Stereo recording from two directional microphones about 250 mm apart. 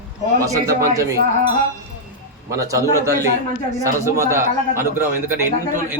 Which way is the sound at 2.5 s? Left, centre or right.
Centre.